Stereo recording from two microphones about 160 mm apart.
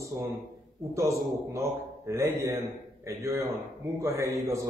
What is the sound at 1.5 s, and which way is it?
A man's voice, 20° right (ahead or behind).